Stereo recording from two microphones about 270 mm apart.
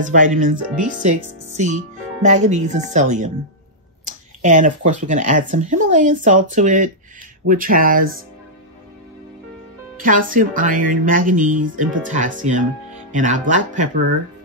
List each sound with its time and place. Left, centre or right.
0.0 s speech: right
9.9 s speech: right